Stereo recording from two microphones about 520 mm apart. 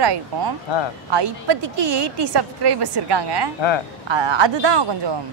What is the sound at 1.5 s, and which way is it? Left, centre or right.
Speech, right.